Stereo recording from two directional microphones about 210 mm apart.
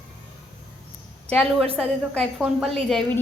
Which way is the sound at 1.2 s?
Centre (ahead or behind).